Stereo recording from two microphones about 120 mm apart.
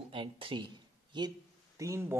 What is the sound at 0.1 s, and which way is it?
Speech, 45° right (ahead or behind).